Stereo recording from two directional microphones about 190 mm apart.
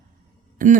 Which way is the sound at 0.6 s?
45° right (ahead or behind).